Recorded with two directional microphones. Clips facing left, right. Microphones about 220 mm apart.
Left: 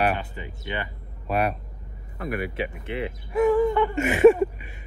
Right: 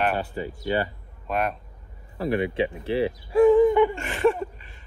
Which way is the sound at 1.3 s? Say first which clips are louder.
Left 2 dB; 5° left (ahead or behind).